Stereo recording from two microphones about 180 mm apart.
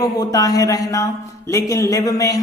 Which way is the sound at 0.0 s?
20° left (ahead or behind).